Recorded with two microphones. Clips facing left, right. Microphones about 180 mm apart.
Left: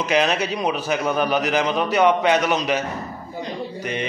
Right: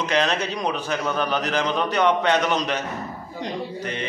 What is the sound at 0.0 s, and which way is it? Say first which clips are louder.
A man's voice: left 2 dB; 10° left (ahead or behind).